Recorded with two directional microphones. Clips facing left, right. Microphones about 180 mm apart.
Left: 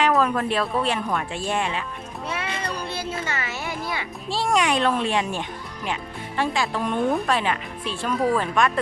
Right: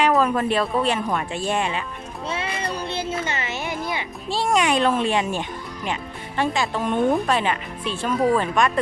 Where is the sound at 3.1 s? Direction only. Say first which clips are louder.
Right 2 dB; 20° right (ahead or behind).